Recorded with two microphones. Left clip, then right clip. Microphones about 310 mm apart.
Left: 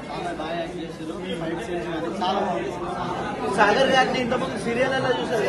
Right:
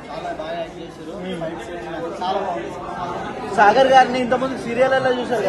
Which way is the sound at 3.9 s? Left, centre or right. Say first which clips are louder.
Right 6 dB; right.